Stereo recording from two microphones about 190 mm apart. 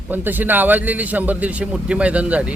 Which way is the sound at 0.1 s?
10° right (ahead or behind).